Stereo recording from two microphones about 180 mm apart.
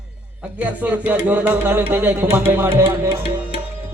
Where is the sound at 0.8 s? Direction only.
10° right (ahead or behind).